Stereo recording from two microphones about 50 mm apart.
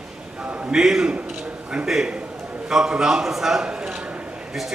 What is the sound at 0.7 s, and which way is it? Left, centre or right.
Speech, centre.